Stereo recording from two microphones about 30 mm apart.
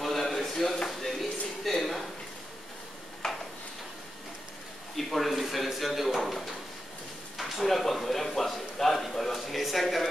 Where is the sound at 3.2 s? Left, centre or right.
Centre.